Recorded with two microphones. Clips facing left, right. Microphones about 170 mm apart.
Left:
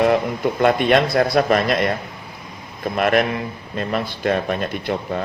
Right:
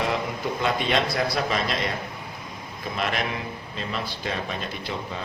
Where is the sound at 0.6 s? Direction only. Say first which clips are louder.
Left 9 dB; 55° left (ahead or behind).